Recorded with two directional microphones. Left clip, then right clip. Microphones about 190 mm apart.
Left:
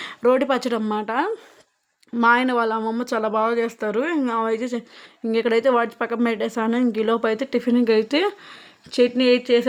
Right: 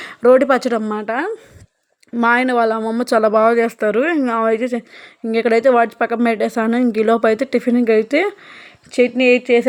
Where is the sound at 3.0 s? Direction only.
25° right (ahead or behind).